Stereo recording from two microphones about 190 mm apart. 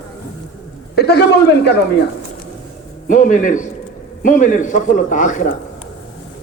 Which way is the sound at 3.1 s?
40° left (ahead or behind).